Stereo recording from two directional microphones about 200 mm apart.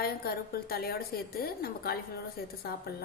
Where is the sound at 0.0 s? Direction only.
50° left (ahead or behind).